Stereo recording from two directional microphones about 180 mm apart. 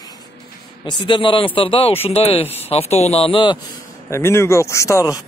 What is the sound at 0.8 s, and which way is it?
Speech, 25° left (ahead or behind).